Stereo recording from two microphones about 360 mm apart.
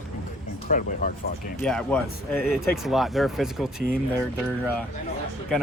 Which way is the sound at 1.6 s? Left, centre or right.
Centre.